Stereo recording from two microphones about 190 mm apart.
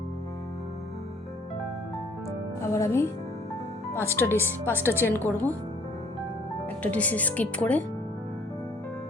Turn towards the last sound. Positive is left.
turn(degrees=10)  # may be behind; listen again after turning